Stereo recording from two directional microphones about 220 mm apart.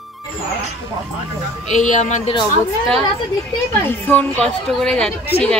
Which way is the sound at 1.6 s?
35° left (ahead or behind).